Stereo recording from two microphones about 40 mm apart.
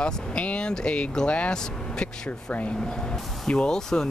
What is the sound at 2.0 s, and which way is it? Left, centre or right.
Speech, left.